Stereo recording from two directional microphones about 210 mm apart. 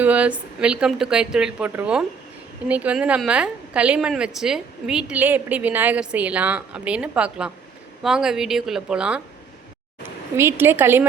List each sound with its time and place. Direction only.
0.0 s a woman's voice: 5° right (ahead or behind)
10.3 s a woman's voice: 10° right (ahead or behind)